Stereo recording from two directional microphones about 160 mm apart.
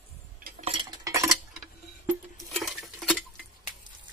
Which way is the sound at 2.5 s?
Centre (ahead or behind).